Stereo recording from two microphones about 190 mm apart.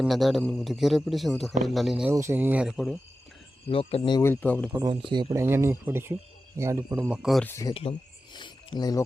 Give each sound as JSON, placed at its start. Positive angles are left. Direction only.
{"t": 0.0, "sound": "speech", "side_deg": 0}
{"t": 2.1, "sound": "speech", "side_deg": -15}
{"t": 3.7, "sound": "speech", "side_deg": 30}
{"t": 4.2, "sound": "speech", "side_deg": 10}
{"t": 4.7, "sound": "speech", "side_deg": -15}
{"t": 7.4, "sound": "speech", "side_deg": 15}
{"t": 7.7, "sound": "speech", "side_deg": 30}